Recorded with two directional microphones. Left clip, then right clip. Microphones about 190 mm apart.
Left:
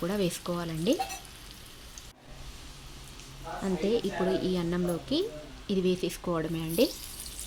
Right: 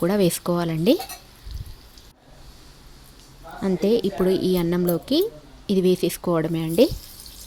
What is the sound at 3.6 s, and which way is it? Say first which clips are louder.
A woman's voice: right 8 dB; 45° right (ahead or behind).